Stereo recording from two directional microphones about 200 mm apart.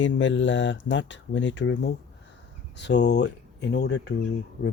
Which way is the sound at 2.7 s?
60° left (ahead or behind).